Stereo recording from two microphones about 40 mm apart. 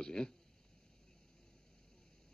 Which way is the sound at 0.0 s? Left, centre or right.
Centre.